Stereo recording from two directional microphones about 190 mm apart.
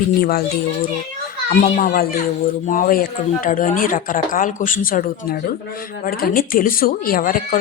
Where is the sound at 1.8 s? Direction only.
45° left (ahead or behind).